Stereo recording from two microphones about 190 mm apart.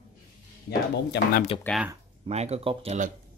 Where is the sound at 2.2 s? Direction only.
35° right (ahead or behind).